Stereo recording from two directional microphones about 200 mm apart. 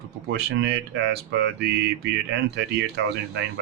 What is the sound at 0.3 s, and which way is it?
Speech, 60° right (ahead or behind).